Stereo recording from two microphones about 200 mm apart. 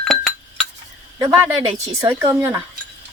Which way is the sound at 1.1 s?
20° right (ahead or behind).